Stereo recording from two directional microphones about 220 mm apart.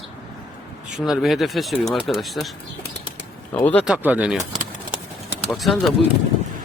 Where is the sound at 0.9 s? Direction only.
Centre (ahead or behind).